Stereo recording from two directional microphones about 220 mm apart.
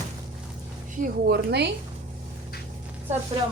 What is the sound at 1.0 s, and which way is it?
Speech, 45° right (ahead or behind).